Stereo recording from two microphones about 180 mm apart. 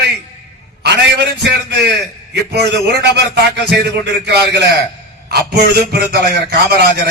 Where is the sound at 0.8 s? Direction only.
70° right (ahead or behind).